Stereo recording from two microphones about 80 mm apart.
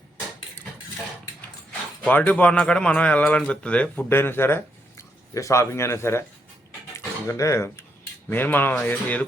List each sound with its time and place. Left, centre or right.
2.0 s a man's voice: left
4.1 s speech: left
7.3 s speech: left
8.3 s speech: left